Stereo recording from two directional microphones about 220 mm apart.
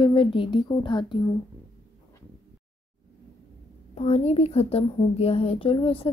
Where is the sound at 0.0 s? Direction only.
25° left (ahead or behind).